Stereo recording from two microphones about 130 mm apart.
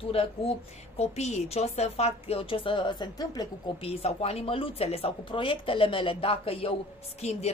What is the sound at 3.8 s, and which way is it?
A woman's voice, 50° left (ahead or behind).